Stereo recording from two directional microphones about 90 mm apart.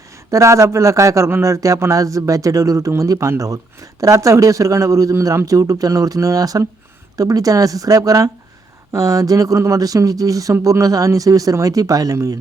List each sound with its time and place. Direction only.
0.3 s speech: 35° right (ahead or behind)